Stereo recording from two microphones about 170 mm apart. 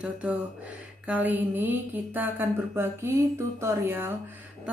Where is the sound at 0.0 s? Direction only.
10° right (ahead or behind).